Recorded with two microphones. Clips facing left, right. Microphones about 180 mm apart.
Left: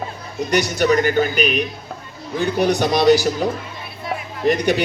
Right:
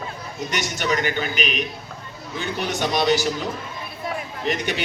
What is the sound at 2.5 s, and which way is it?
Speech, 40° left (ahead or behind).